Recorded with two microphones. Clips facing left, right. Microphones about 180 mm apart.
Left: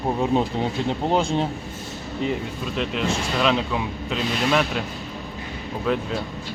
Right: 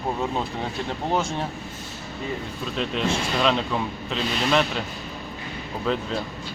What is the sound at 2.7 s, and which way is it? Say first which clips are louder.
A man's voice: even; centre (ahead or behind).